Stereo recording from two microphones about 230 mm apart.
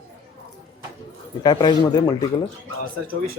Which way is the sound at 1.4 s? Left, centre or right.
Centre.